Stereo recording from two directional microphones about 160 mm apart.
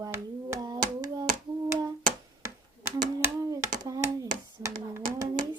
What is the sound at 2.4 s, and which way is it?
Hands, 20° right (ahead or behind).